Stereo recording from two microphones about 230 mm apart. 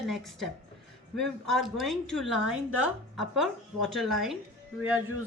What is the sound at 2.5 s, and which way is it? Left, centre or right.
Speech, right.